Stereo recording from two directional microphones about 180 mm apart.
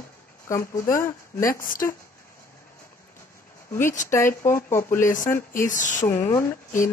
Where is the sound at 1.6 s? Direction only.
50° left (ahead or behind).